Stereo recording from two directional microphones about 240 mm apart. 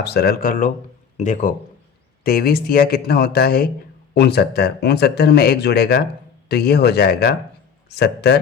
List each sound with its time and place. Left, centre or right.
0.0 s speech: left